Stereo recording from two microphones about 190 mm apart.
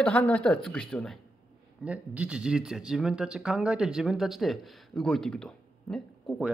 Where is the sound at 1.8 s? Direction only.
5° right (ahead or behind).